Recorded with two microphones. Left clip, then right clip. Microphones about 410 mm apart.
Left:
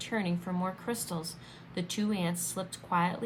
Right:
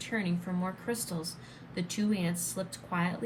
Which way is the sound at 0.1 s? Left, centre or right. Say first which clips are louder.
Even; centre.